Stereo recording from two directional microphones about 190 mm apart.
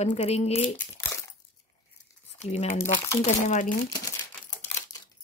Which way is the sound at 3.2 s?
40° left (ahead or behind).